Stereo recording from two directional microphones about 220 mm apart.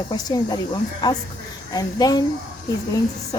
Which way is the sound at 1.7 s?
15° left (ahead or behind).